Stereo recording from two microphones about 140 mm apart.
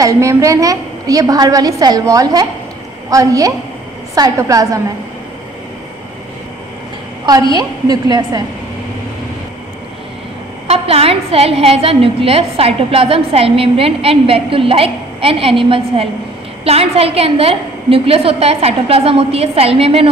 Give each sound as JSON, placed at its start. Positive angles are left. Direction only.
{"t": 0.0, "sound": "a woman's voice", "side_deg": -20}
{"t": 7.2, "sound": "a woman's voice", "side_deg": -30}
{"t": 10.7, "sound": "a woman's voice", "side_deg": -45}